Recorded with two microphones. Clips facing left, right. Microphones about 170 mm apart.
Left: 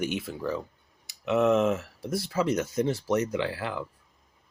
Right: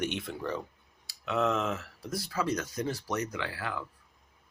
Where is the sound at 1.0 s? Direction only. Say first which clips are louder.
Left 6 dB; 20° left (ahead or behind).